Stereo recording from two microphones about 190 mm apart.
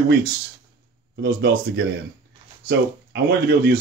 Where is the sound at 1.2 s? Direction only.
60° right (ahead or behind).